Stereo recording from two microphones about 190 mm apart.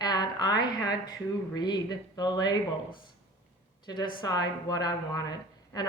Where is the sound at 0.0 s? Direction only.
20° left (ahead or behind).